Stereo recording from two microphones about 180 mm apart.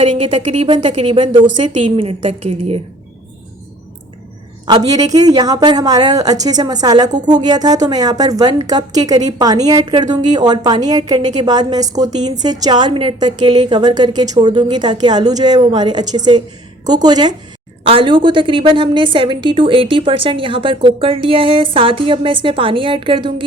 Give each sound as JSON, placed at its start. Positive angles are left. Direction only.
{"t": 0.0, "sound": "a woman's voice", "side_deg": -35}
{"t": 4.6, "sound": "a woman's voice", "side_deg": -20}